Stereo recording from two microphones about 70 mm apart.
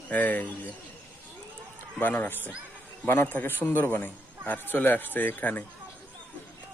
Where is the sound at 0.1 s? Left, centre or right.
Left.